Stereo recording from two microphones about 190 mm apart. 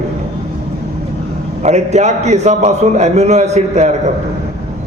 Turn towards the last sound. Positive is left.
turn(degrees=-35)  # may be behind; listen again after turning